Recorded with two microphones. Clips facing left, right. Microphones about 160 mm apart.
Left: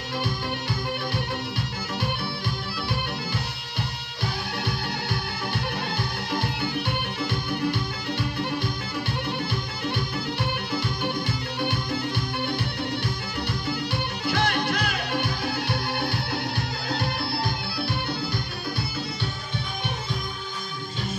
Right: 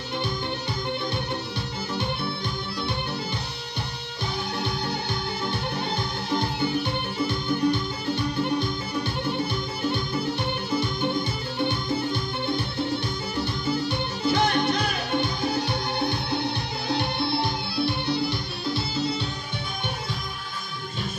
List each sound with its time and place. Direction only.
4.6 s music: 25° right (ahead or behind)
9.8 s music: 25° right (ahead or behind)
13.4 s music: 25° right (ahead or behind)